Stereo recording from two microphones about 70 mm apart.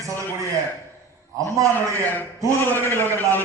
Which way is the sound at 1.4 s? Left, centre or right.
Right.